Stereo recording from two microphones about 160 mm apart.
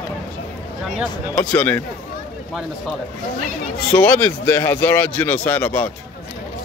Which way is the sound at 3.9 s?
10° left (ahead or behind).